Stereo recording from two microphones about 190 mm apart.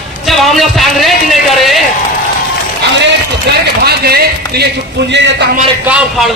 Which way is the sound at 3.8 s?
55° right (ahead or behind).